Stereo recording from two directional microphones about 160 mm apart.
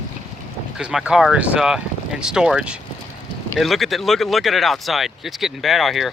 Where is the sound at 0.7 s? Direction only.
5° right (ahead or behind).